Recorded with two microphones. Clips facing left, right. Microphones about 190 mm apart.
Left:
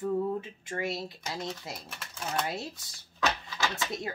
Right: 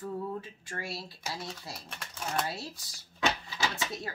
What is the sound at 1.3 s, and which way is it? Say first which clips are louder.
Speech: left 1 dB; 5° right (ahead or behind).